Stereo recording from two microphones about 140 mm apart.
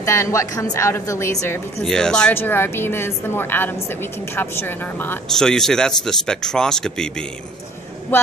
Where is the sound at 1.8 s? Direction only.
5° left (ahead or behind).